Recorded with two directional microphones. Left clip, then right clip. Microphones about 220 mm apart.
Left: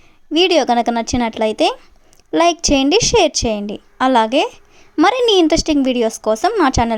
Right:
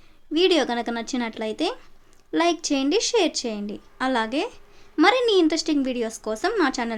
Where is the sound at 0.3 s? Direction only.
30° left (ahead or behind).